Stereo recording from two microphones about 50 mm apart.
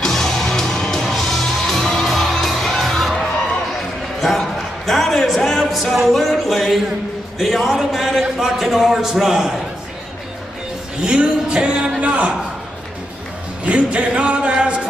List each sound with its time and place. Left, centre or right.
0.0 s music: centre
7.3 s a man's voice: centre
11.1 s music: centre
13.7 s a sound: right